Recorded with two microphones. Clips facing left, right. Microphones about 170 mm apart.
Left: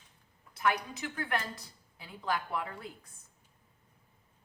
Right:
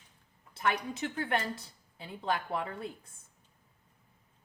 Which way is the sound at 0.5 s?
30° right (ahead or behind).